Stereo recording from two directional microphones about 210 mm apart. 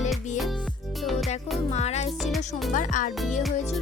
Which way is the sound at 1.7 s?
30° left (ahead or behind).